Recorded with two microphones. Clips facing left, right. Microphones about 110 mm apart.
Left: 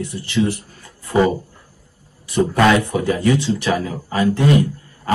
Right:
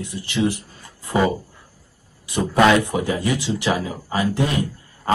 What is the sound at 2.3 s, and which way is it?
Speech, 20° right (ahead or behind).